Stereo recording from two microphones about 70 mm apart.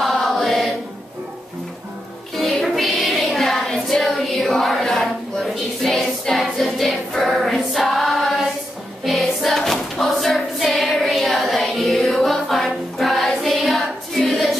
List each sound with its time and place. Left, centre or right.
0.0 s chant: centre
2.3 s music: centre
9.0 s choir: centre